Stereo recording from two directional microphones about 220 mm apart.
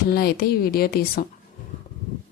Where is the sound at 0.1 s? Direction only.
45° left (ahead or behind).